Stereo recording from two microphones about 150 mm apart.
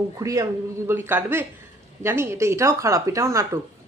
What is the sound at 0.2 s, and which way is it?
A woman's voice, 20° right (ahead or behind).